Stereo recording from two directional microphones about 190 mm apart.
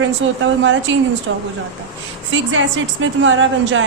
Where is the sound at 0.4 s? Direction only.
80° right.